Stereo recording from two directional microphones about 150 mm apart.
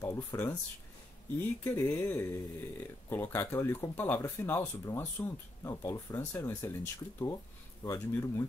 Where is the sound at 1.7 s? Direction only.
15° left (ahead or behind).